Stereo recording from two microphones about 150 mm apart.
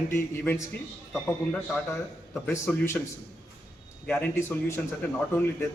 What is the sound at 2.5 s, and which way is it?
Speech, 15° left (ahead or behind).